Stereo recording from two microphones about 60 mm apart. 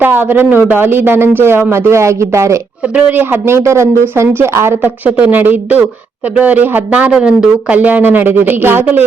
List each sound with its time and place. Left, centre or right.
0.0 s speech: right
2.9 s speech: right
3.4 s speech: right
4.1 s speech: right
4.8 s speech: right
5.4 s speech: right
7.1 s speech: centre
7.8 s speech: right